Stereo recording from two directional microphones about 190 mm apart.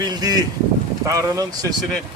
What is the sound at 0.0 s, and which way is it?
Speech, 20° right (ahead or behind).